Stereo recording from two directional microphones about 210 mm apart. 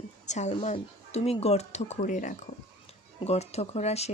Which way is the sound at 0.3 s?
35° left (ahead or behind).